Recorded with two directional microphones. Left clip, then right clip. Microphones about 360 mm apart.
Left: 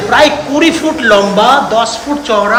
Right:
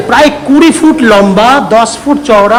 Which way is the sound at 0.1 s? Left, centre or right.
Centre.